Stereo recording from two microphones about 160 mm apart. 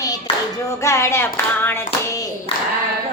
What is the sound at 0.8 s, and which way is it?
Clapping, 15° left (ahead or behind).